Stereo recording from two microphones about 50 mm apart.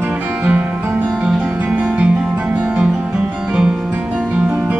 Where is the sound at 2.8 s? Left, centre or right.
Centre.